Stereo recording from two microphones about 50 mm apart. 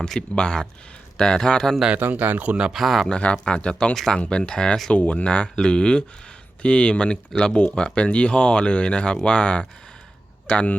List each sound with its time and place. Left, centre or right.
0.0 s speech: centre
2.0 s speech: right
2.7 s speech: centre
3.1 s speech: left